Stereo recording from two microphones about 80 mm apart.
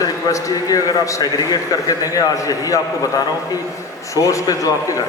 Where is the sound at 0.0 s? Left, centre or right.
Left.